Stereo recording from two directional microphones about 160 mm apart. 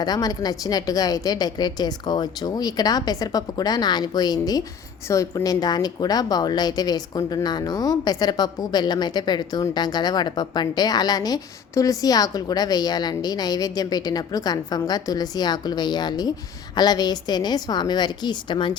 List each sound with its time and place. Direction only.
0.0 s a woman's voice: 25° left (ahead or behind)